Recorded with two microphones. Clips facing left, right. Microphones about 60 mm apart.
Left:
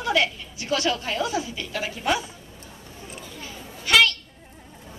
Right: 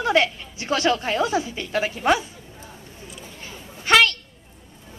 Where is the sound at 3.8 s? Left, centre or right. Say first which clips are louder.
Right 2 dB; right.